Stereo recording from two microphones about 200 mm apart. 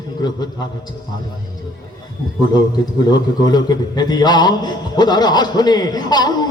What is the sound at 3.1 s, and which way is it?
A man's voice, 20° left (ahead or behind).